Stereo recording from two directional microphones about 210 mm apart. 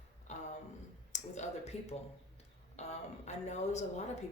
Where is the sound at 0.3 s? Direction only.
35° left (ahead or behind).